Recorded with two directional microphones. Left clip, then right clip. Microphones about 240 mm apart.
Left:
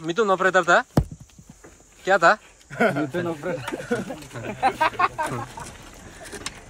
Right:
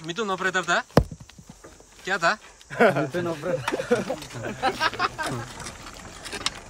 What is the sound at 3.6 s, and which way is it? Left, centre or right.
Speech, right.